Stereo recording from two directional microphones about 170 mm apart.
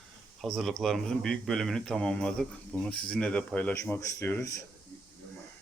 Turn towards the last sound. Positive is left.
turn(degrees=15)  # may be behind; listen again after turning